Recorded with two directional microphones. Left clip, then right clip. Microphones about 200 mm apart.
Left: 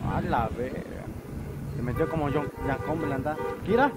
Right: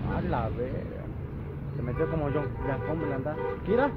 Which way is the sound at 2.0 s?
45° left (ahead or behind).